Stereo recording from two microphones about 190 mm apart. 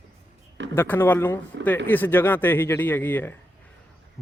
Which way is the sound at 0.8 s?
10° left (ahead or behind).